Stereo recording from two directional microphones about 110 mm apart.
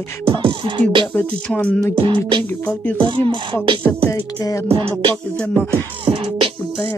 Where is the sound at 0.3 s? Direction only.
50° right (ahead or behind).